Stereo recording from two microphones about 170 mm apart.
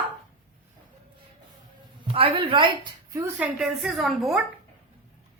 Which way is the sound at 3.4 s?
Centre (ahead or behind).